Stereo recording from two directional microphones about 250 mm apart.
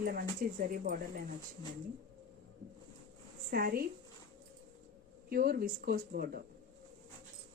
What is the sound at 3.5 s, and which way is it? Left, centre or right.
Speech, right.